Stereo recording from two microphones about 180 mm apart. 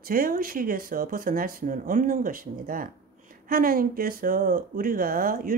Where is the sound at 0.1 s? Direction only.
50° right (ahead or behind).